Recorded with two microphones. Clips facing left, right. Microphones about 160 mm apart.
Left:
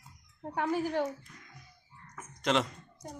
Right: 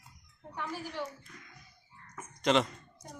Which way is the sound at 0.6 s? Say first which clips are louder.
Left 8 dB; 50° left (ahead or behind).